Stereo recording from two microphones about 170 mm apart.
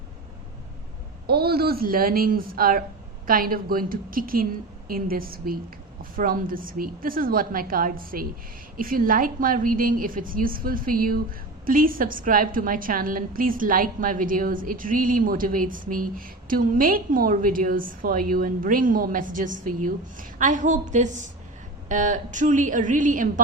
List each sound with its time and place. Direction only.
1.3 s a woman's voice: 65° right (ahead or behind); by 23.3 s 50° right (ahead or behind)